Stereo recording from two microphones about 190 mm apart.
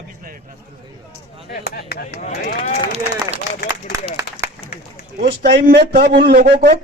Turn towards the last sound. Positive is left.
turn(degrees=-60)  # may be behind; listen again after turning